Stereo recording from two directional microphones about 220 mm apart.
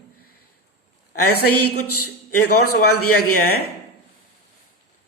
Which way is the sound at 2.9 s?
90° left.